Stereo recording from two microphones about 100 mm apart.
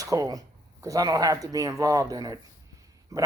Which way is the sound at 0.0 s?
35° right (ahead or behind).